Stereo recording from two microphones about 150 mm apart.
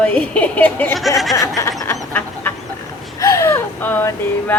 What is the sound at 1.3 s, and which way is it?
Snicker, 20° left (ahead or behind).